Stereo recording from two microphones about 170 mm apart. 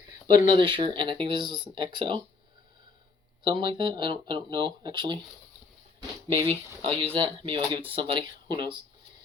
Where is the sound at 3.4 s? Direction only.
30° right (ahead or behind).